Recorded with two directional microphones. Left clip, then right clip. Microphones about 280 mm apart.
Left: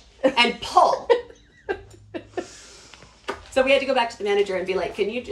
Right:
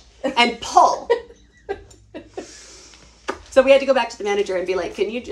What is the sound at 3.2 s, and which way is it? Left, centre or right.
Speech, centre.